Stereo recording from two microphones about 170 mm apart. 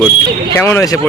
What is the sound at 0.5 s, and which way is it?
Speech, 15° left (ahead or behind).